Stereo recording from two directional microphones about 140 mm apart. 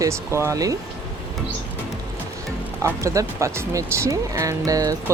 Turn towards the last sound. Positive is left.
turn(degrees=-25)  # may be behind; listen again after turning